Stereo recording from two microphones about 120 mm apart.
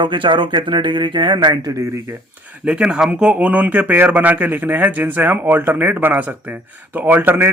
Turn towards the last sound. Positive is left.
turn(degrees=-15)  # may be behind; listen again after turning